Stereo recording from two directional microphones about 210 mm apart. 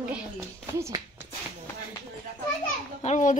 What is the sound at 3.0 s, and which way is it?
Speech, 35° left (ahead or behind).